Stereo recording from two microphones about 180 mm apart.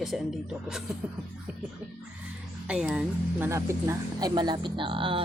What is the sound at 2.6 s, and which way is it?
Speech, 5° right (ahead or behind).